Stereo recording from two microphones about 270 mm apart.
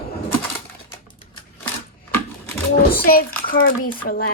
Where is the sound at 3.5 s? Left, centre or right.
Left.